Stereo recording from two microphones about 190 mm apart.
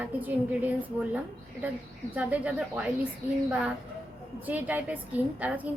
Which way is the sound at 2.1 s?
10° right (ahead or behind).